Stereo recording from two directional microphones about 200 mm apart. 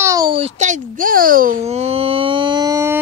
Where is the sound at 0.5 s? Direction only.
40° right (ahead or behind).